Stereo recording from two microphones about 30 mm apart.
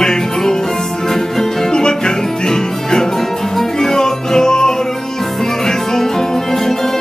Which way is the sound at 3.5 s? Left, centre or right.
Centre.